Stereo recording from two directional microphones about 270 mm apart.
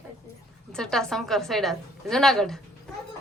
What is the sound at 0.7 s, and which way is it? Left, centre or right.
A woman's voice, centre.